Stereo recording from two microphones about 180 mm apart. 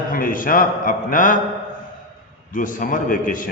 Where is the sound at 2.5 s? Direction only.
45° left (ahead or behind).